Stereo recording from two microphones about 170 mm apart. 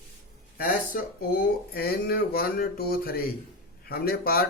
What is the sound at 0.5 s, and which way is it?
A man's voice, 55° left (ahead or behind).